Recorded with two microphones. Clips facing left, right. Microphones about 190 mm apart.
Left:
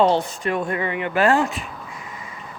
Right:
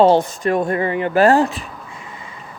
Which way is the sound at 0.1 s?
45° right (ahead or behind).